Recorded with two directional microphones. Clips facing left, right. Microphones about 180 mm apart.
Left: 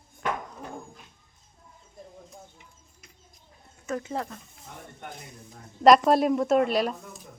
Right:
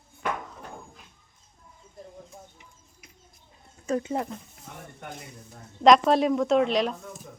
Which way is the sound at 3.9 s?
25° right (ahead or behind).